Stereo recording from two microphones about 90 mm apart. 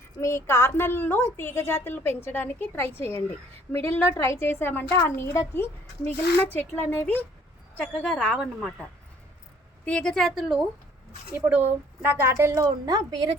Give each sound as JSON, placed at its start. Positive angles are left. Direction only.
{"t": 0.2, "sound": "a woman's voice", "side_deg": 30}
{"t": 9.8, "sound": "a woman's voice", "side_deg": 10}
{"t": 11.3, "sound": "speech", "side_deg": -20}